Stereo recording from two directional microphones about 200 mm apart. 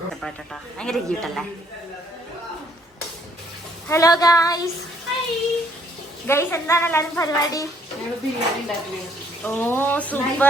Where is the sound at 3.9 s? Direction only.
15° left (ahead or behind).